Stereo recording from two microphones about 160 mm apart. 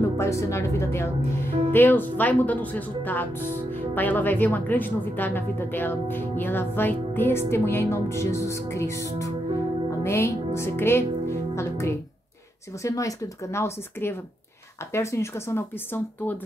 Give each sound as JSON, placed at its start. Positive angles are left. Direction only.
{"t": 0.2, "sound": "speech", "side_deg": 20}